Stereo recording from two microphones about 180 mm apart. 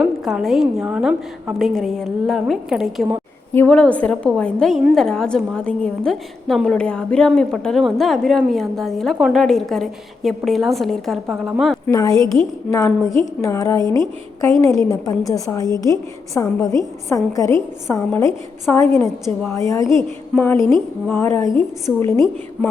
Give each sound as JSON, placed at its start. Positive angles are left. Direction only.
{"t": 0.0, "sound": "a woman's voice", "side_deg": -5}
{"t": 3.5, "sound": "a woman's voice", "side_deg": 10}
{"t": 11.9, "sound": "a woman's voice", "side_deg": 20}